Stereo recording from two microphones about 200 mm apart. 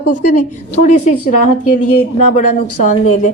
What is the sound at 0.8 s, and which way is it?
Speech, 35° left (ahead or behind).